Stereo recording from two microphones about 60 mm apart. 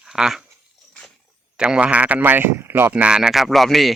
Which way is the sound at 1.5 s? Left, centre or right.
Centre.